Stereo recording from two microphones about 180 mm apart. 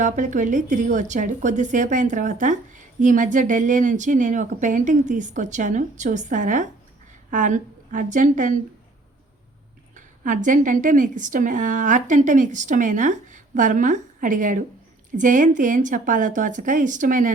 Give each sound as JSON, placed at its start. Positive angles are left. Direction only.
{"t": 0.0, "sound": "a woman's voice", "side_deg": -45}
{"t": 9.9, "sound": "speech", "side_deg": -45}